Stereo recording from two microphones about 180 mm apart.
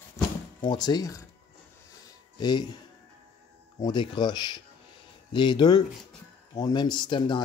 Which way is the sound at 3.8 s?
25° left (ahead or behind).